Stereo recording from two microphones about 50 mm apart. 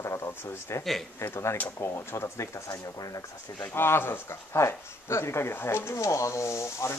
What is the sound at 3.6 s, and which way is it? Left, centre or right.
Speech, left.